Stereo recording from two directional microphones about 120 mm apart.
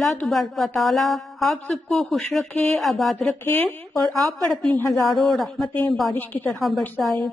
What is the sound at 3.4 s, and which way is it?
Speech, 15° left (ahead or behind).